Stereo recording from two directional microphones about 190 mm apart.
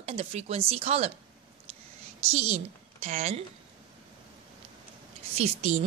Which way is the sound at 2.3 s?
35° right (ahead or behind).